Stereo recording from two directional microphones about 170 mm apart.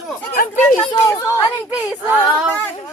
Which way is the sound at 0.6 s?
10° left (ahead or behind).